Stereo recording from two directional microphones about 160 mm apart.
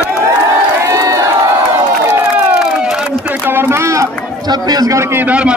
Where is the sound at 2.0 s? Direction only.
5° right (ahead or behind).